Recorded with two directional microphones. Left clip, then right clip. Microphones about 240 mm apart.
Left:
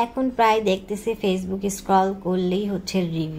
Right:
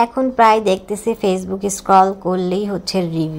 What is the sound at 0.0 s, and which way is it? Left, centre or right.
A woman's voice, centre.